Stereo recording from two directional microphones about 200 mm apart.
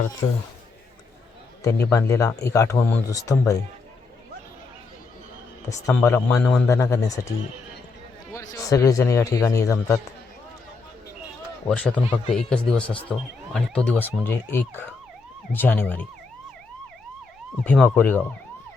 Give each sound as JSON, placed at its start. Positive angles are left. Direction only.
{"t": 1.6, "sound": "speech", "side_deg": 15}
{"t": 5.6, "sound": "speech", "side_deg": 15}
{"t": 8.3, "sound": "speech", "side_deg": 15}
{"t": 11.7, "sound": "speech", "side_deg": 5}
{"t": 17.6, "sound": "speech", "side_deg": 0}